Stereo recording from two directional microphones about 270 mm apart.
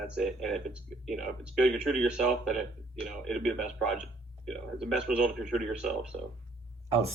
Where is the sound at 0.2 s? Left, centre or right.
Centre.